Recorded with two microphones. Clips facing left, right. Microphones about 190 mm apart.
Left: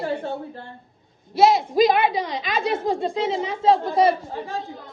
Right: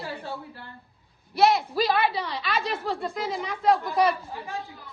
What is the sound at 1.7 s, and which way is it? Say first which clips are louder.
Speech: left 6 dB; 15° left (ahead or behind).